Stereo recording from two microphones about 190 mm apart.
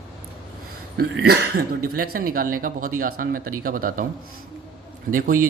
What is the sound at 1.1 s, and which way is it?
Speech, 55° right (ahead or behind).